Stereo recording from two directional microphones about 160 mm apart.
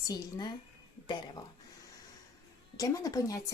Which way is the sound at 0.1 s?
25° left (ahead or behind).